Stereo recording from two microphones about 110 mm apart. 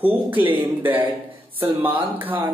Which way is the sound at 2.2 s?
15° right (ahead or behind).